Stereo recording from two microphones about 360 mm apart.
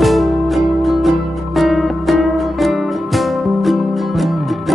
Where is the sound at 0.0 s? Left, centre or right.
Centre.